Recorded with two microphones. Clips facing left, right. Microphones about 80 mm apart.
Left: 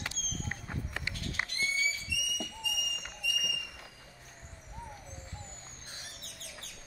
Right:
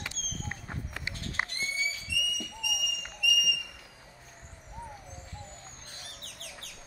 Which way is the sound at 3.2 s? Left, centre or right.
Left.